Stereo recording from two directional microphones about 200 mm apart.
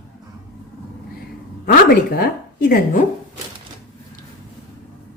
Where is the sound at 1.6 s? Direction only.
50° left (ahead or behind).